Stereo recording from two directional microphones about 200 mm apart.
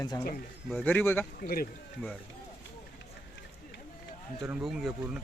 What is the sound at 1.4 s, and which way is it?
Speech, 50° left (ahead or behind).